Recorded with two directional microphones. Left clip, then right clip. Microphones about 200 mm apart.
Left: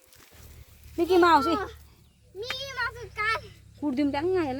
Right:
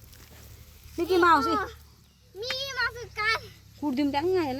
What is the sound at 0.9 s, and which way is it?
Speech, 40° left (ahead or behind).